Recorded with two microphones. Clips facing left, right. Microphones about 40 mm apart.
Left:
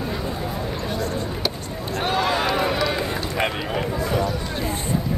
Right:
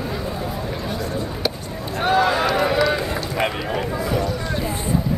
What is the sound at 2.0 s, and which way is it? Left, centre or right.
Run, centre.